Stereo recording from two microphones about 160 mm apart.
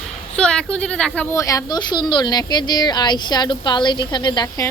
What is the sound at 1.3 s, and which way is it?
Speech, 20° left (ahead or behind).